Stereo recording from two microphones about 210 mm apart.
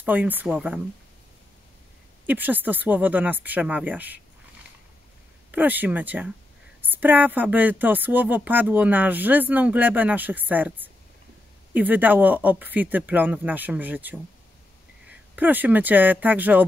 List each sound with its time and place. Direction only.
0.0 s speech: 10° right (ahead or behind)
2.2 s speech: 10° right (ahead or behind)
5.5 s speech: 10° right (ahead or behind)